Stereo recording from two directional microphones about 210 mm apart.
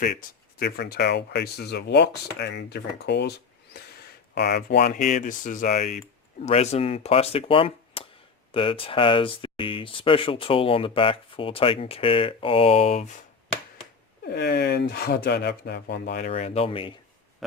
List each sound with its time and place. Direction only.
0.6 s speech: 50° left (ahead or behind); by 13.1 s 30° left (ahead or behind)
14.3 s speech: 50° left (ahead or behind); by 16.9 s 25° left (ahead or behind)